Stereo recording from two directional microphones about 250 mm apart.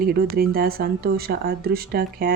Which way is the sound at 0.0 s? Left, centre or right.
Right.